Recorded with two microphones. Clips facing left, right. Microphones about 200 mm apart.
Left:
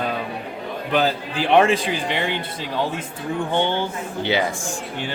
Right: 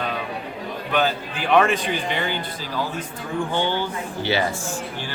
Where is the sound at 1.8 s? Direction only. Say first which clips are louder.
Left 1 dB; 90° left.